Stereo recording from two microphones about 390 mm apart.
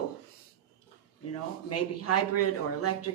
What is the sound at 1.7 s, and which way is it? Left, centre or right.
Speech, left.